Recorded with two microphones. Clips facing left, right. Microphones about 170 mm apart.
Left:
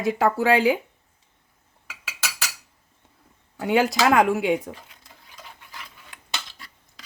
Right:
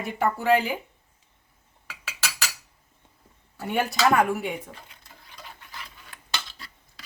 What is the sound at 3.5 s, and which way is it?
Speech, 90° left.